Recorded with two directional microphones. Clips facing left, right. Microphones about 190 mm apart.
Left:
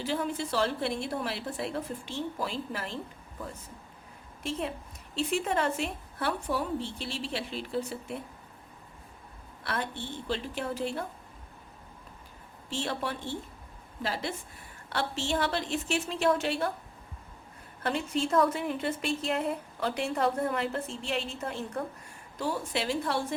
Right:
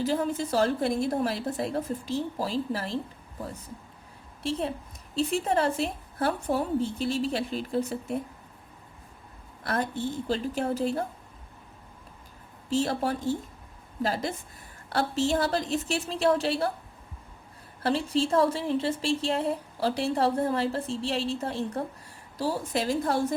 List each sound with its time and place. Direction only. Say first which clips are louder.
0.0 s speech: right 4 dB; 40° right (ahead or behind)
4.4 s speech: right 4 dB; 35° right (ahead or behind)
9.6 s speech: right 6 dB; 40° right (ahead or behind)
12.7 s speech: right 7 dB; 40° right (ahead or behind)
17.8 s speech: right 4 dB; 35° right (ahead or behind)